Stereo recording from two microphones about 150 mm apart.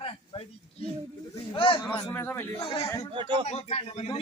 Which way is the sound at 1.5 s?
35° left (ahead or behind).